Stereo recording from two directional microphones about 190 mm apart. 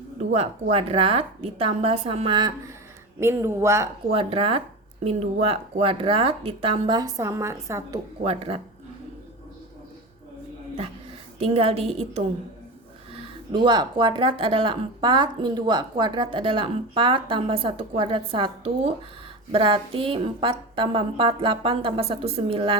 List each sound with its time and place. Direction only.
0.3 s speech: 30° right (ahead or behind); by 3.8 s 15° right (ahead or behind)
4.1 s speech: 30° right (ahead or behind); by 7.9 s 15° right (ahead or behind)
8.2 s a woman's voice: 30° right (ahead or behind)
11.3 s a woman's voice: 30° right (ahead or behind)
13.5 s speech: 25° right (ahead or behind)